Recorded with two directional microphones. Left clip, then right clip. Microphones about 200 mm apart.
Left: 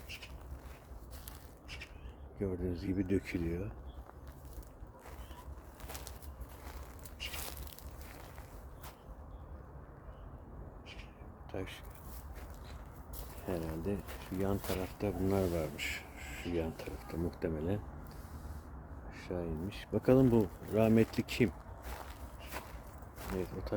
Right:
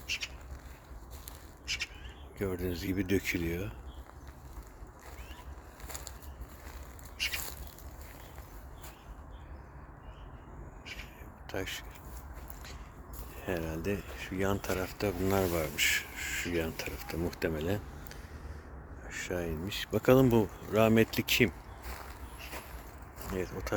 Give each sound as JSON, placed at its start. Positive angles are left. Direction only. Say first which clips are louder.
{"t": 1.6, "sound": "bird", "louder": "right 13 dB", "side_deg": 40}
{"t": 2.4, "sound": "speech", "louder": "right 3 dB", "side_deg": 0}
{"t": 7.2, "sound": "a sound", "louder": "right 10 dB", "side_deg": 20}
{"t": 11.4, "sound": "speech", "louder": "right 6 dB", "side_deg": -5}
{"t": 13.5, "sound": "speech", "louder": "right 4 dB", "side_deg": -5}
{"t": 19.0, "sound": "speech", "louder": "right 5 dB", "side_deg": -5}
{"t": 23.3, "sound": "speech", "louder": "right 3 dB", "side_deg": -5}